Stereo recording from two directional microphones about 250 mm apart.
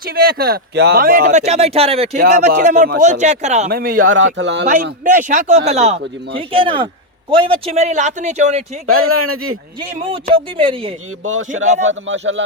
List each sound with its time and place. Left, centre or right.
0.0 s speech: right
3.9 s speech: right
4.6 s speech: right
8.9 s speech: right
10.3 s speech: right
11.3 s speech: right